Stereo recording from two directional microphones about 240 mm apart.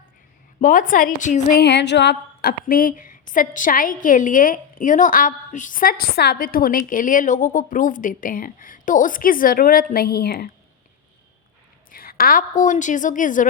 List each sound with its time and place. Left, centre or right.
0.6 s a woman's voice: left
11.9 s a woman's voice: left